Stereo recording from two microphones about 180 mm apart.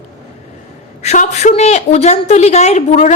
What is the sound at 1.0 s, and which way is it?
A woman's voice, 40° left (ahead or behind).